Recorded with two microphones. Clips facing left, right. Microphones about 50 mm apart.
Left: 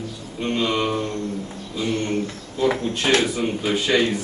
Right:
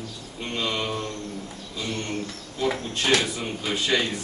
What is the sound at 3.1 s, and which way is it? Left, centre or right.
Speech, centre.